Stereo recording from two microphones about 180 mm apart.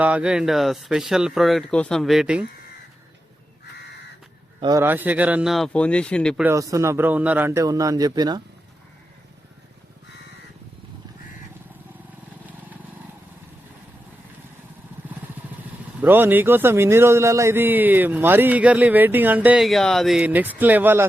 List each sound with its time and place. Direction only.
0.0 s speech: 5° right (ahead or behind)
4.6 s speech: 15° right (ahead or behind); by 6.4 s 5° left (ahead or behind)
6.4 s a man's voice: 15° right (ahead or behind)
16.0 s a man's voice: 10° right (ahead or behind)